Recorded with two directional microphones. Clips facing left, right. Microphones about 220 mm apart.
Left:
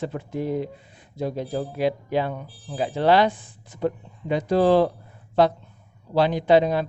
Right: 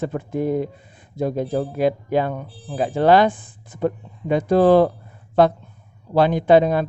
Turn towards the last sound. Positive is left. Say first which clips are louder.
# right 3 dB
turn(degrees=-50)  # may be behind; listen again after turning